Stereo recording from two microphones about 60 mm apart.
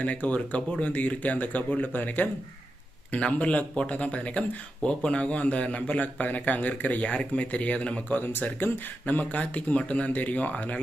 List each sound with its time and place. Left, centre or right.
0.0 s speech: left